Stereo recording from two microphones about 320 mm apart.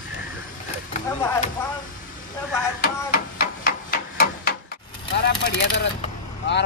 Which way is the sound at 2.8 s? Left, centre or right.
Left.